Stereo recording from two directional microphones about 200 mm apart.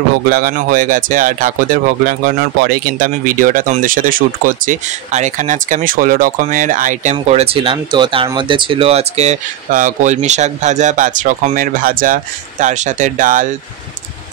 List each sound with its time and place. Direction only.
0.3 s speech: 45° right (ahead or behind)